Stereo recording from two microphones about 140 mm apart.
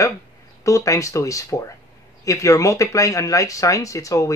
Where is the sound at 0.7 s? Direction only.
20° left (ahead or behind).